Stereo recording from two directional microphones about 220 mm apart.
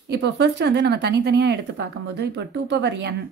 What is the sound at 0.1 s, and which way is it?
A woman's voice, 50° right (ahead or behind).